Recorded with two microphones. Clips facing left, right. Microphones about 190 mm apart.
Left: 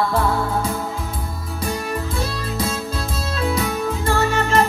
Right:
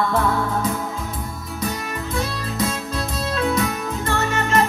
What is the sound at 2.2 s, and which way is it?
Music, 30° left (ahead or behind).